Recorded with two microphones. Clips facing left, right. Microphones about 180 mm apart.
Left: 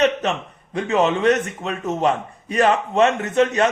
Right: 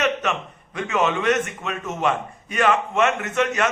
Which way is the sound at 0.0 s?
30° left (ahead or behind).